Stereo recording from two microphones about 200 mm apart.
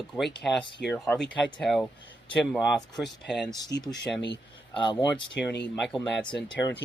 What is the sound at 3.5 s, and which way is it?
Speech, 20° left (ahead or behind).